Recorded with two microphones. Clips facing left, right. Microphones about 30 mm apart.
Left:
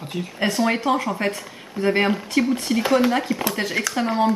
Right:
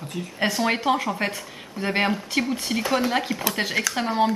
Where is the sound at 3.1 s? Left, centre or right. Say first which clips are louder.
Left 2 dB; centre.